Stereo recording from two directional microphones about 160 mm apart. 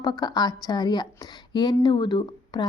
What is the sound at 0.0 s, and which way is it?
A woman's voice, 25° left (ahead or behind).